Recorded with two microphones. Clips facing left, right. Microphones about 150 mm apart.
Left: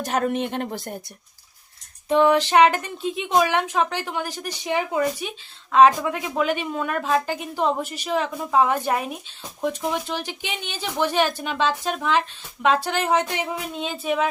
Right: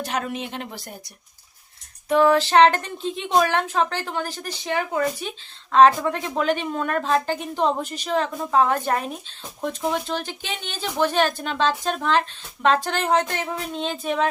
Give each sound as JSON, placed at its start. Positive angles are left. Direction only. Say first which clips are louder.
{"t": 0.0, "sound": "speech", "louder": "left 4 dB", "side_deg": 45}
{"t": 2.0, "sound": "a woman's voice", "louder": "even", "side_deg": 20}